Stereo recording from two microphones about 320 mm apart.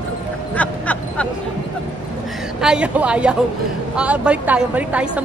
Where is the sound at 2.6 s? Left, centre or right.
Centre.